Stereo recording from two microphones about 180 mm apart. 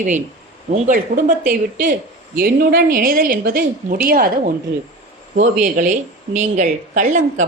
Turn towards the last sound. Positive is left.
turn(degrees=-45)  # may be behind; listen again after turning